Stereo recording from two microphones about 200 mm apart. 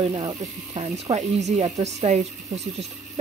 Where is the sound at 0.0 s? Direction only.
20° right (ahead or behind).